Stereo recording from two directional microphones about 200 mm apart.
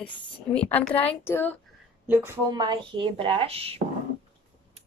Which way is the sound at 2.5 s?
20° right (ahead or behind).